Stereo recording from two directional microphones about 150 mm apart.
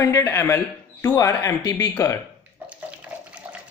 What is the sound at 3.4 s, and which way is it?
Water, 10° right (ahead or behind).